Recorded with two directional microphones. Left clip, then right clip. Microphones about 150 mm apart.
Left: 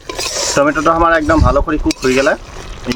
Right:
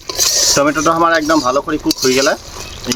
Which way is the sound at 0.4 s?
5° left (ahead or behind).